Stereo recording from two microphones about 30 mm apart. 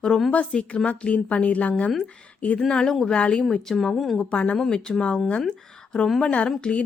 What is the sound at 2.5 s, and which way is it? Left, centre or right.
Speech, centre.